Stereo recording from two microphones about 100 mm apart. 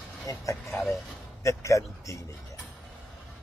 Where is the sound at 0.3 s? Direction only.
35° left (ahead or behind).